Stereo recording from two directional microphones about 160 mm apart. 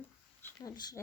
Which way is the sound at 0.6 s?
25° left (ahead or behind).